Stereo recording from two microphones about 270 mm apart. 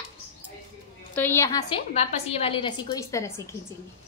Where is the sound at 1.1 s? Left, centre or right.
Centre.